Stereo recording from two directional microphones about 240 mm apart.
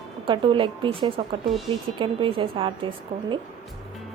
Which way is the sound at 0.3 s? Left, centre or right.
Right.